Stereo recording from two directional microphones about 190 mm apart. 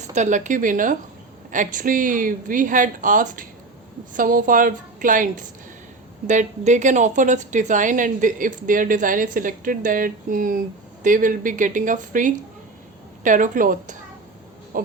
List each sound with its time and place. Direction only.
0.0 s a woman's voice: 40° right (ahead or behind)